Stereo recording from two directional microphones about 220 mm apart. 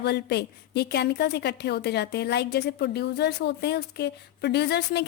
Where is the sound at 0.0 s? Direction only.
50° left (ahead or behind).